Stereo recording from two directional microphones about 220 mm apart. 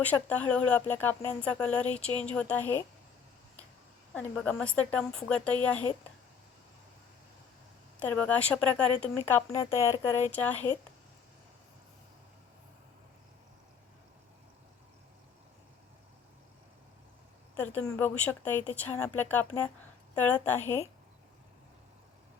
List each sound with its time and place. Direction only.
0.0 s speech: 5° left (ahead or behind)
4.1 s speech: 5° left (ahead or behind)
7.9 s speech: 5° left (ahead or behind)
17.6 s speech: 10° left (ahead or behind)